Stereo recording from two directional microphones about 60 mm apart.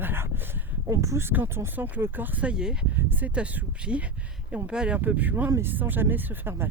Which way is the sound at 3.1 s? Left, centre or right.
Right.